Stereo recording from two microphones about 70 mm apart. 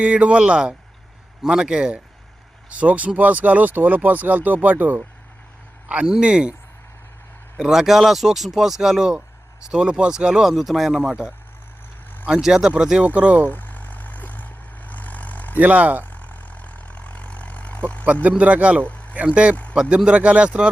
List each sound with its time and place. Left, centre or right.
0.0 s speech: centre
5.9 s speech: centre
7.6 s speech: centre
13.5 s vehicle: left
15.5 s speech: right
16.0 s vehicle: left
18.0 s speech: right
18.9 s vehicle: left
19.1 s speech: centre